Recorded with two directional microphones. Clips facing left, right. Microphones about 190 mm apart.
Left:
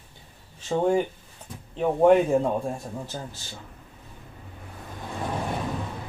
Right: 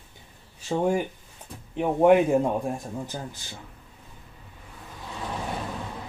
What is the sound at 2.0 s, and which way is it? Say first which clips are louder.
Speech: even; 10° right (ahead or behind).